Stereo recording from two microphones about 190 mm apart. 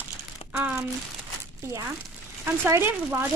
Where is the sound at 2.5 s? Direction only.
15° right (ahead or behind).